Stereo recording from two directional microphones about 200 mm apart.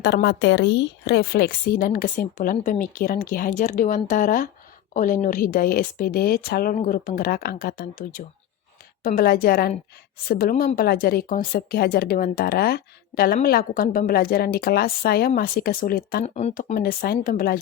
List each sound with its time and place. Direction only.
0.0 s speech: 55° left (ahead or behind)
16.2 s speech: 35° left (ahead or behind)